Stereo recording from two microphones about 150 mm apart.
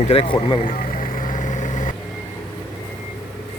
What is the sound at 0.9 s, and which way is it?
Vehicle, 70° left (ahead or behind).